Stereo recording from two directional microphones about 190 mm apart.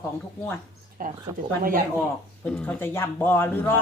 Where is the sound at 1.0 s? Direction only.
45° right (ahead or behind).